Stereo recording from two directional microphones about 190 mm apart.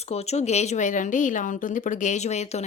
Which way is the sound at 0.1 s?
35° left (ahead or behind).